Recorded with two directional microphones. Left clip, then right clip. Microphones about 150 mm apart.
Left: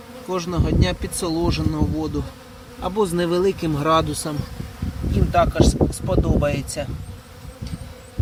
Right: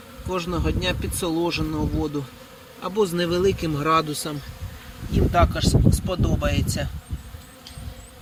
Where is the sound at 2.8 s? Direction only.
5° left (ahead or behind).